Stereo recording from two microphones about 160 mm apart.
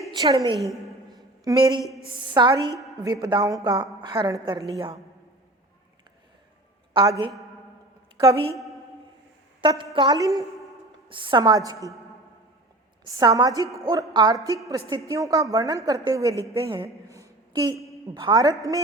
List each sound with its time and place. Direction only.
0.1 s a woman's voice: 25° right (ahead or behind)
0.6 s a woman's voice: centre (ahead or behind)
1.1 s a sound: 25° right (ahead or behind)
2.1 s a woman's voice: 30° right (ahead or behind)
6.9 s a woman's voice: 20° right (ahead or behind)
9.6 s a woman's voice: 30° right (ahead or behind)
13.1 s a woman's voice: 25° right (ahead or behind)
16.6 s a woman's voice: 35° right (ahead or behind)
17.5 s a sound: 25° right (ahead or behind)
18.1 s a woman's voice: 25° right (ahead or behind)